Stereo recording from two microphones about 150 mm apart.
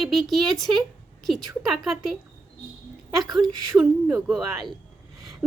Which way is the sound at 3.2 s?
Centre (ahead or behind).